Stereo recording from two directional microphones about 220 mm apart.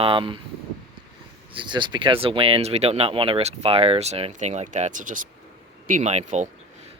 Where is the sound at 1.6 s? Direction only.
20° right (ahead or behind).